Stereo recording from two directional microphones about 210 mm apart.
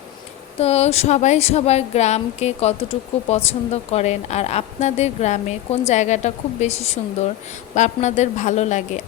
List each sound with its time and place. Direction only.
0.6 s a woman's voice: 30° left (ahead or behind)